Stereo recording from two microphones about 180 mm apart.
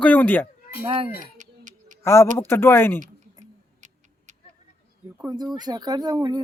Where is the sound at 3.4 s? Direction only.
40° right (ahead or behind).